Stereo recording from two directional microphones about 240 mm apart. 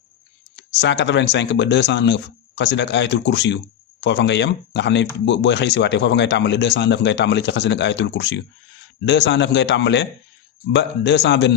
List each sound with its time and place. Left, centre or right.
0.5 s speech: left